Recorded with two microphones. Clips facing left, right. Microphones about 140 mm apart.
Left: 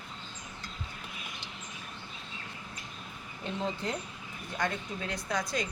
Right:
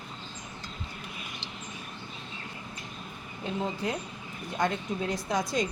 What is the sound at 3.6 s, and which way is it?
Speech, 10° right (ahead or behind).